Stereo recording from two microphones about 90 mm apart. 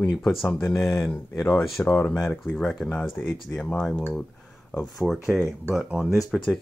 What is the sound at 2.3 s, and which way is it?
Speech, 20° left (ahead or behind).